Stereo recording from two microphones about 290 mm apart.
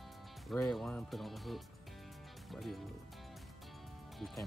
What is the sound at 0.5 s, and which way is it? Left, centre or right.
Speech, centre.